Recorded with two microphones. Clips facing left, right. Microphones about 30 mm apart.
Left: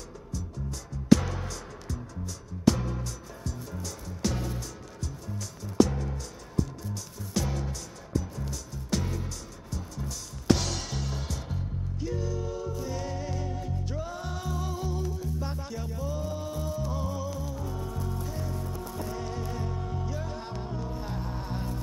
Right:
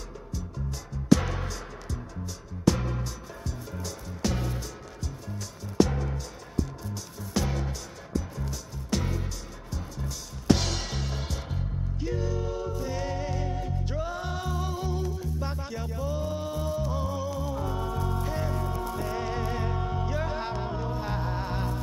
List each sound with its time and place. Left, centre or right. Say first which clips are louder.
1.2 s music: right 2 dB; centre
7.3 s music: right 2 dB; centre
17.4 s music: right 5 dB; right